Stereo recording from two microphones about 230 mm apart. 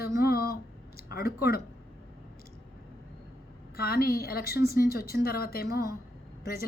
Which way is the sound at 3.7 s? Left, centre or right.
Left.